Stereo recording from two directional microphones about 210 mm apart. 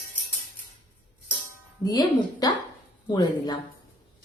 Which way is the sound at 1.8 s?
20° left (ahead or behind).